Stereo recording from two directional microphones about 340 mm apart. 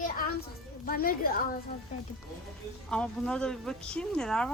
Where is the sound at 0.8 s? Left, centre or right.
Left.